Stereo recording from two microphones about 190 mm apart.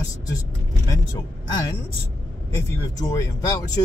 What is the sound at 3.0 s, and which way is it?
Speech, 20° left (ahead or behind).